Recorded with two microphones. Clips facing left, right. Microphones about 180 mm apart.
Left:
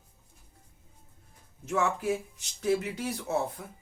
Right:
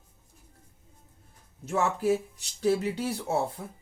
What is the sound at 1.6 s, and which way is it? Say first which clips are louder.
Speech: right 3 dB; 35° right (ahead or behind).